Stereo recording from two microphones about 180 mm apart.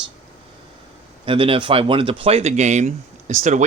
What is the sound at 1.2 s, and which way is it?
Speech, 30° right (ahead or behind).